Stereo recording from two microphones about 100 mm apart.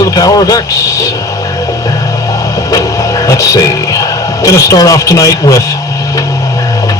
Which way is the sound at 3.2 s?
35° left (ahead or behind).